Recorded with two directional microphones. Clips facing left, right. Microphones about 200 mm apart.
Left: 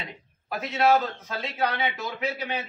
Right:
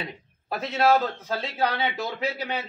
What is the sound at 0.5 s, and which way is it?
A man's voice, 30° right (ahead or behind).